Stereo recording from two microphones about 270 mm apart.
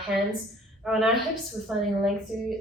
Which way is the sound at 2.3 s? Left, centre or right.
Centre.